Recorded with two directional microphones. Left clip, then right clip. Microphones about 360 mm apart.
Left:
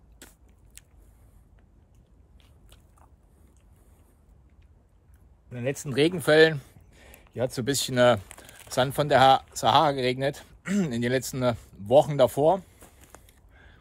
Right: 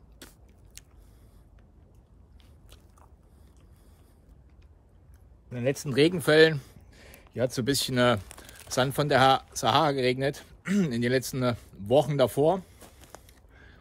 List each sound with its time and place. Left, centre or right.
0.2 s biting: centre
0.8 s a sound: centre
5.5 s speech: centre